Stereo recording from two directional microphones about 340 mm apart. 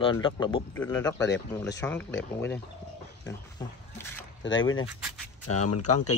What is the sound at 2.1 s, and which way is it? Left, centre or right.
Speech, left.